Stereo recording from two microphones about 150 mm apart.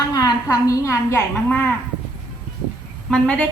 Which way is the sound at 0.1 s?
25° left (ahead or behind).